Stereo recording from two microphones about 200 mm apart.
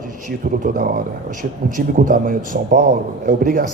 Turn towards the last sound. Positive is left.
turn(degrees=-40)  # may be behind; listen again after turning